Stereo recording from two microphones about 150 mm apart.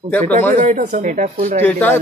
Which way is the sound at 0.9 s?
50° right (ahead or behind).